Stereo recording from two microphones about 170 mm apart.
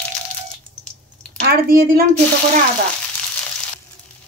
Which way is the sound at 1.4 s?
60° right (ahead or behind).